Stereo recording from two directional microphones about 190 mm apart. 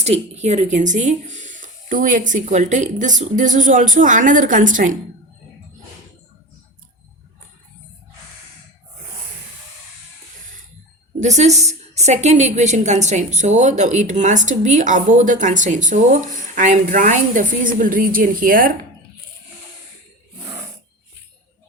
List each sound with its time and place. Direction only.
0.0 s a woman's voice: 35° right (ahead or behind)
11.2 s a woman's voice: 35° right (ahead or behind)